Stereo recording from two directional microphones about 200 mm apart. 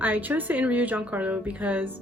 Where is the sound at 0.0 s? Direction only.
10° right (ahead or behind).